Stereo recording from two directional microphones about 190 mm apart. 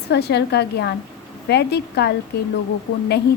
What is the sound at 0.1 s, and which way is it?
A woman's voice, 60° left (ahead or behind).